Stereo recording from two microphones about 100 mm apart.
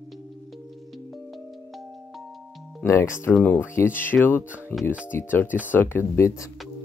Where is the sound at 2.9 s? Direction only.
25° left (ahead or behind).